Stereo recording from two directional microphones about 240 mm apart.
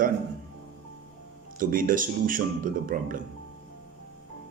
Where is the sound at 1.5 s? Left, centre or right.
Right.